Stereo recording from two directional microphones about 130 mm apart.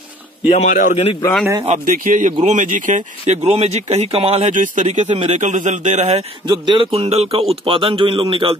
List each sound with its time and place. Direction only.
0.5 s speech: 65° left (ahead or behind)
1.7 s speech: 85° right
2.4 s speech: 75° right (ahead or behind)
6.4 s a man's voice: 35° right (ahead or behind)